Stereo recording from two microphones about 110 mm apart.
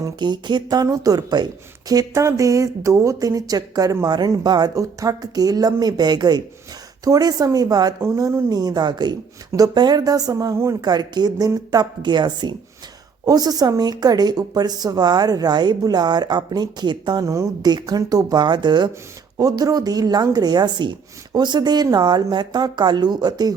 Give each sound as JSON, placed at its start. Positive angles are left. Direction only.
{"t": 0.0, "sound": "speech", "side_deg": -40}
{"t": 8.0, "sound": "speech", "side_deg": -25}
{"t": 8.5, "sound": "speech", "side_deg": -40}